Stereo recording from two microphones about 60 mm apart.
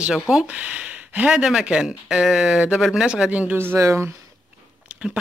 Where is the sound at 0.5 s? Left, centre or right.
Right.